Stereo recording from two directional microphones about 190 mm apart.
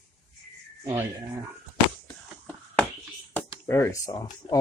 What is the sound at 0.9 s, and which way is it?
Speech, 15° right (ahead or behind).